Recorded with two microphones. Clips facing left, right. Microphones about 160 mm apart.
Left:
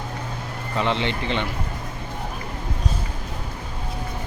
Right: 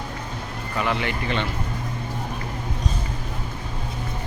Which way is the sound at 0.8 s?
25° left (ahead or behind).